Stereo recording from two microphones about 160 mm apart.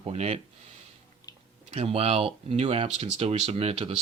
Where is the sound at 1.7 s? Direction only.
40° right (ahead or behind).